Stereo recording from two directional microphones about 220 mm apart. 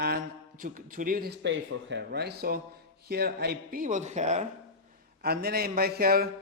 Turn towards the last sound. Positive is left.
turn(degrees=-45)  # may be behind; listen again after turning